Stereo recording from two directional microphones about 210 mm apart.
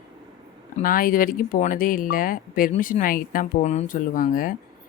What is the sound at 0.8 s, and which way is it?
Speech, 40° left (ahead or behind).